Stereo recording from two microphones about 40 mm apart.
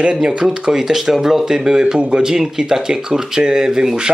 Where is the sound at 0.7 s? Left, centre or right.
Centre.